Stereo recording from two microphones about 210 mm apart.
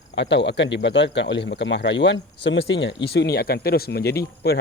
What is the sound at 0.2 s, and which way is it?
Speech, 55° left (ahead or behind).